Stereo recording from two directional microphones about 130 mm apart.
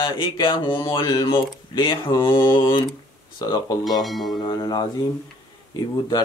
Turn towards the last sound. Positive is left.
turn(degrees=30)  # may be behind; listen again after turning